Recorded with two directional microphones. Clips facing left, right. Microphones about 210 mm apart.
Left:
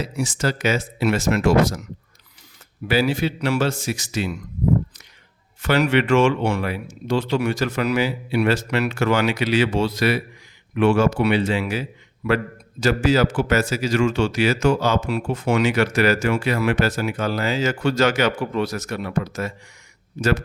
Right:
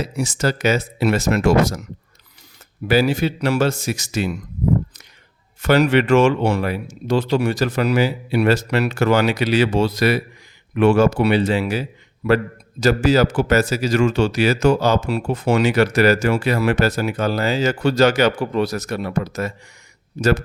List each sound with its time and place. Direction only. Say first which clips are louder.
0.0 s speech: right 2 dB; 40° right (ahead or behind)
2.8 s speech: right 3 dB; 40° right (ahead or behind)
5.6 s speech: right 3 dB; 40° right (ahead or behind)